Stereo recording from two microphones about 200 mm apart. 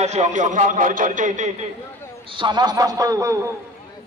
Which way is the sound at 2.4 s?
20° right (ahead or behind).